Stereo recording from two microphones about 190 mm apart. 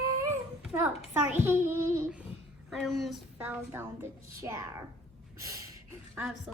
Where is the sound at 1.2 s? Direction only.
10° right (ahead or behind).